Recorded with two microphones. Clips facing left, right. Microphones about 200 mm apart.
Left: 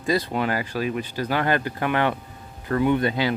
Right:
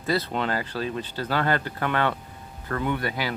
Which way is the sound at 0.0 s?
15° left (ahead or behind).